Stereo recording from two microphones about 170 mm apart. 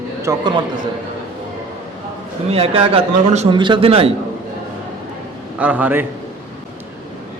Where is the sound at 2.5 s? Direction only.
35° right (ahead or behind).